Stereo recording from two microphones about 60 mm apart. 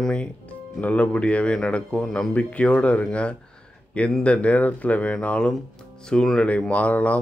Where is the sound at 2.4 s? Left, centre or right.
Left.